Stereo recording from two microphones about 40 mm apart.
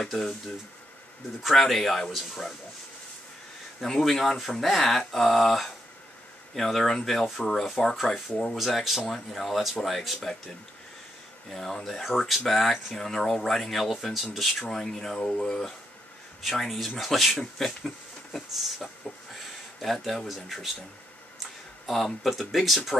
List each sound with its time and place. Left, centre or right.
0.0 s speech: centre
1.4 s speech: centre
3.8 s speech: centre
8.5 s speech: centre
11.5 s speech: centre
14.7 s speech: centre
16.4 s speech: centre
19.1 s a sound: centre
19.8 s speech: centre